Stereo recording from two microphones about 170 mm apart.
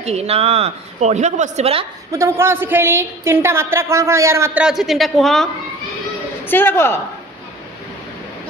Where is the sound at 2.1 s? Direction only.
15° right (ahead or behind).